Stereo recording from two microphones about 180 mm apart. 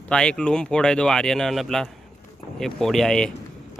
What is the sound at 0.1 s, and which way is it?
Speech, 5° left (ahead or behind).